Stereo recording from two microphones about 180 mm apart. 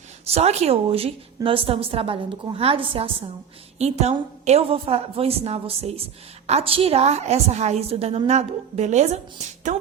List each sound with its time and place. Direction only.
0.3 s a woman's voice: 35° right (ahead or behind)